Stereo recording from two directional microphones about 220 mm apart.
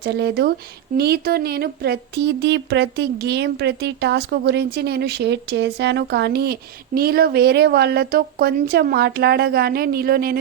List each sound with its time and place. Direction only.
0.0 s speech: 45° right (ahead or behind)